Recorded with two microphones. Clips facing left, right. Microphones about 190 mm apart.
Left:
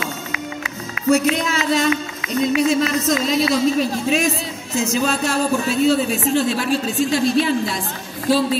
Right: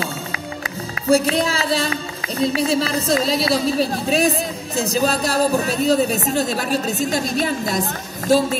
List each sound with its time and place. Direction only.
1.0 s a woman's voice: 35° right (ahead or behind)